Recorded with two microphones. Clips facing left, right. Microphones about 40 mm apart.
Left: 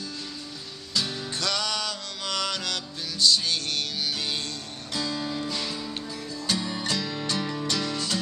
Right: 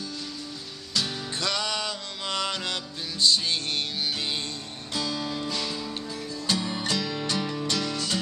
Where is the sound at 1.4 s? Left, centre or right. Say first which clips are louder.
Even; centre.